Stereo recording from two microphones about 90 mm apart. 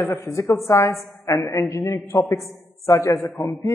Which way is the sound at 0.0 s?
30° left (ahead or behind).